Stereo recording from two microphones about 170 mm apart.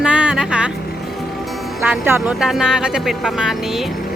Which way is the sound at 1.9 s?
15° right (ahead or behind).